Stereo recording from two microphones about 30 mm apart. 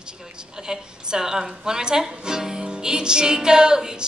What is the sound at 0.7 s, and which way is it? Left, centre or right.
Speech, right.